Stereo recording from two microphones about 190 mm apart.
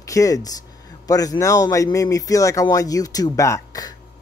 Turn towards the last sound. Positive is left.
turn(degrees=15)  # may be behind; listen again after turning